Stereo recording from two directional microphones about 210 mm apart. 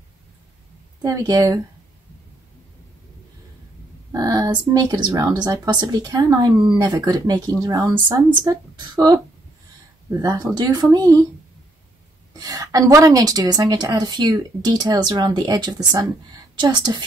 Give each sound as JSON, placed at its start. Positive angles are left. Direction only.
{"t": 1.0, "sound": "a woman's voice", "side_deg": -20}
{"t": 4.1, "sound": "a woman's voice", "side_deg": -20}
{"t": 12.4, "sound": "a woman's voice", "side_deg": -15}